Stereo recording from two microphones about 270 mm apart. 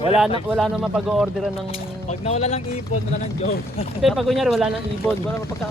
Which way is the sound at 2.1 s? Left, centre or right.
Left.